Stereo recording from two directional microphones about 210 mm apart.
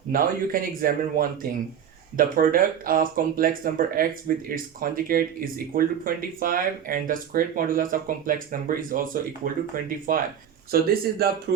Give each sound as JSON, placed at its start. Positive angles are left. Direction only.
{"t": 0.1, "sound": "speech", "side_deg": -40}